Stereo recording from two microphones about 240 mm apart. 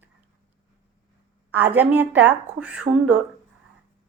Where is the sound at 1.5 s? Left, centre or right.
Centre.